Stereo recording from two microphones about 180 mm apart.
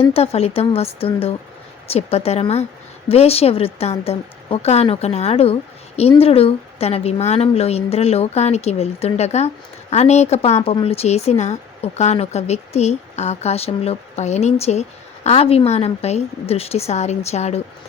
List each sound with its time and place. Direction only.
0.1 s speech: 35° left (ahead or behind)